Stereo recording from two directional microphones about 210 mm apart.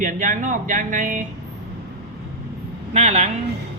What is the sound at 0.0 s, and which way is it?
A man's voice, 40° right (ahead or behind).